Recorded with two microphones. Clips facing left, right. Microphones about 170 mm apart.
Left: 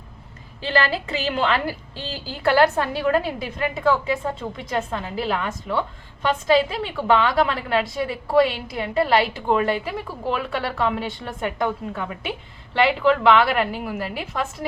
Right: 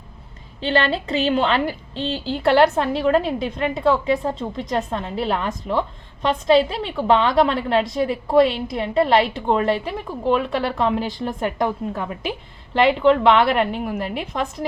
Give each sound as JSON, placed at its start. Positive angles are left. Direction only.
{"t": 0.6, "sound": "a woman's voice", "side_deg": -25}